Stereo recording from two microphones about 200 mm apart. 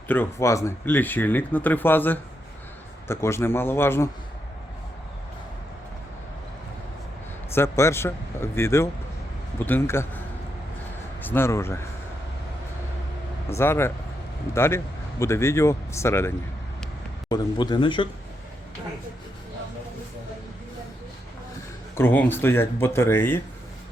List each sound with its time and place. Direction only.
0.1 s speech: 10° left (ahead or behind)
7.5 s speech: 15° left (ahead or behind)
11.2 s speech: 10° left (ahead or behind)
13.5 s speech: 15° left (ahead or behind)
21.9 s speech: 10° left (ahead or behind)